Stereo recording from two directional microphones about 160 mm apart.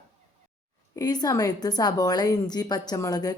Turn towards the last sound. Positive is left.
turn(degrees=25)  # may be behind; listen again after turning